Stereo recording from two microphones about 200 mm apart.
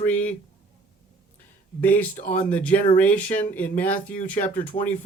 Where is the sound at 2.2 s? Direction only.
40° left (ahead or behind).